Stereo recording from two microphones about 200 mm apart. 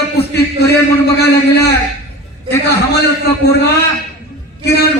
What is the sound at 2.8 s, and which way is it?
Speech, 55° left (ahead or behind).